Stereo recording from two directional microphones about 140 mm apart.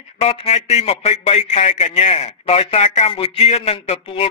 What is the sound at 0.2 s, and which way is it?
A man's voice, 45° left (ahead or behind).